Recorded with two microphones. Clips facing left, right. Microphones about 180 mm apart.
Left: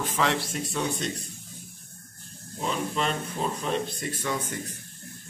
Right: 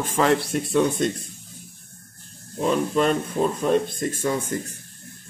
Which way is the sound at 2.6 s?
50° right (ahead or behind).